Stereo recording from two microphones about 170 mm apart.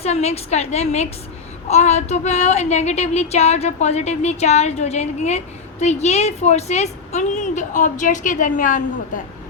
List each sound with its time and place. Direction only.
0.0 s a woman's voice: 40° left (ahead or behind)